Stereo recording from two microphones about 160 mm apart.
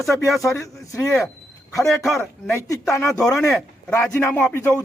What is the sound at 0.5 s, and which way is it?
Speech, 20° left (ahead or behind).